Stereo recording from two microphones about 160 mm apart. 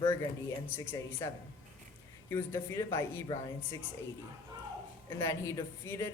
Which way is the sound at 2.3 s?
15° left (ahead or behind).